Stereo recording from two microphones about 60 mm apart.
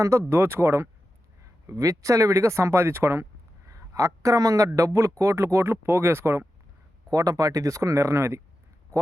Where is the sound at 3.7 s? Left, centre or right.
Right.